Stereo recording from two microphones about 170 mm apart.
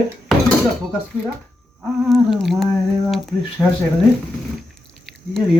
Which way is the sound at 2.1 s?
Centre (ahead or behind).